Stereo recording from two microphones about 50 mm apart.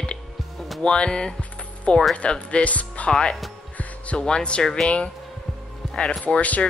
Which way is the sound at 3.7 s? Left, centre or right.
Left.